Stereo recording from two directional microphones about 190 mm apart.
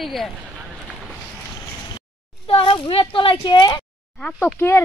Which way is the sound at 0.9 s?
Centre (ahead or behind).